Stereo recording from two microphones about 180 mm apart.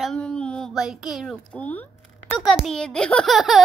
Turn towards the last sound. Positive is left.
turn(degrees=0)  # may be behind; listen again after turning